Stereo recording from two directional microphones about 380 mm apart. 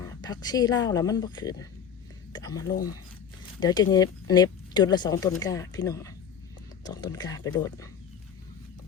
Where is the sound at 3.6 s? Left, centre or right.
Centre.